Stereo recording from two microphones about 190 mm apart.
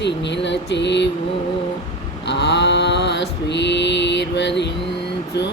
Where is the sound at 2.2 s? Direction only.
65° left (ahead or behind).